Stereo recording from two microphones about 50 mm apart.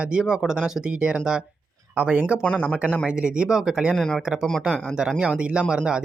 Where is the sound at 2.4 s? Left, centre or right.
Left.